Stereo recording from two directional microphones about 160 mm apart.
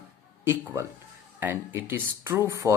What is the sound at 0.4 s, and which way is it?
Speech, 10° right (ahead or behind).